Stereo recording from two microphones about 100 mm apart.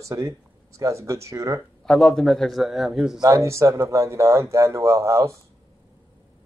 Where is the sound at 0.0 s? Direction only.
30° right (ahead or behind).